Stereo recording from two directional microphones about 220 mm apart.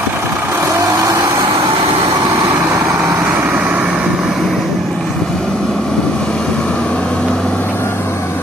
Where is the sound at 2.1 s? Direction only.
15° right (ahead or behind).